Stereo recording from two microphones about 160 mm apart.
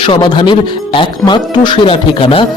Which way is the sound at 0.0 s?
30° left (ahead or behind).